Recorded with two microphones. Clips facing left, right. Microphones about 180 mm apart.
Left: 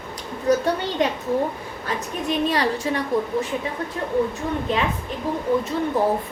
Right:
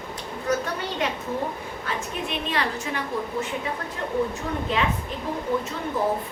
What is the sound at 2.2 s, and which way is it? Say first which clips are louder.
Speech: left 8 dB; 40° left (ahead or behind).